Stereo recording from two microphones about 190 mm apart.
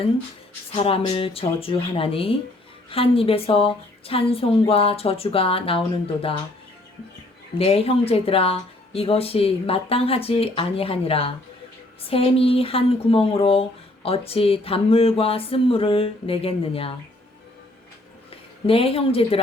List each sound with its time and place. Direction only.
0.7 s speech: 30° left (ahead or behind)
7.6 s speech: 30° left (ahead or behind)
18.3 s a woman's voice: 30° left (ahead or behind)